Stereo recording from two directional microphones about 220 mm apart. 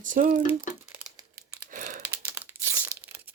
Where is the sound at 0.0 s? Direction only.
35° right (ahead or behind).